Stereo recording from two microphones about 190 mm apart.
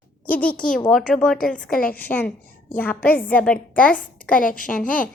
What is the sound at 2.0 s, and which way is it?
A woman's voice, 10° left (ahead or behind).